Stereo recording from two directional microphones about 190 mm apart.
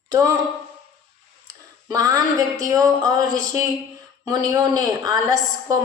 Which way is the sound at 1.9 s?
20° right (ahead or behind).